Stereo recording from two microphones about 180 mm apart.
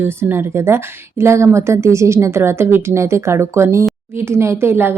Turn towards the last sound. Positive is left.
turn(degrees=-15)  # may be behind; listen again after turning